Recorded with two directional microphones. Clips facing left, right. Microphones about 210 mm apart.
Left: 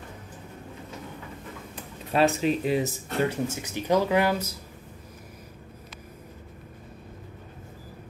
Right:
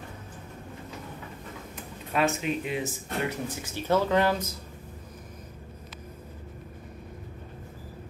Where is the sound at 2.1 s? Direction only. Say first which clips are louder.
Left 4 dB; 35° left (ahead or behind).